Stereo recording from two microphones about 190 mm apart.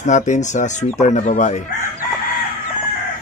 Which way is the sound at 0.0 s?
40° left (ahead or behind).